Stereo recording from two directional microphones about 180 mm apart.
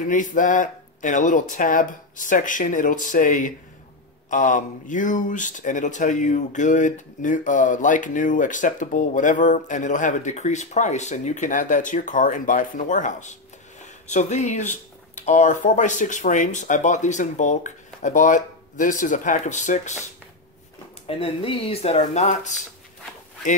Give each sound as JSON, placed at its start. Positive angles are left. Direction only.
{"t": 0.0, "sound": "speech", "side_deg": 45}
{"t": 21.2, "sound": "speech", "side_deg": 30}